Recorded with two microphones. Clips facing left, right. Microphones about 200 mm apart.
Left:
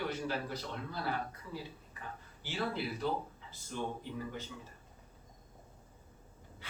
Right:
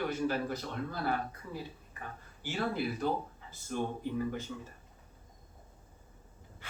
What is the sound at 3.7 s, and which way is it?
Speech, 55° right (ahead or behind).